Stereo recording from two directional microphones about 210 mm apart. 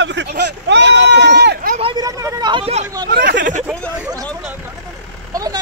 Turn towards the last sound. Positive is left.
turn(degrees=-15)  # may be behind; listen again after turning